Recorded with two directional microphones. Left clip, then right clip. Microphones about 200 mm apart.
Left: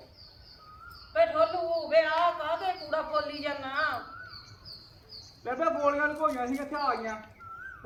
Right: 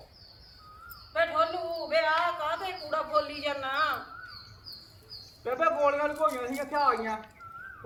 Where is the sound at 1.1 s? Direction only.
10° right (ahead or behind).